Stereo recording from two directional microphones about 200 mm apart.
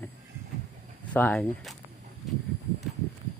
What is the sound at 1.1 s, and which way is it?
Speech, 10° left (ahead or behind).